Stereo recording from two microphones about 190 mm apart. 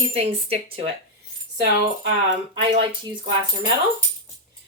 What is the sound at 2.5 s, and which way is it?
Speech, 25° right (ahead or behind).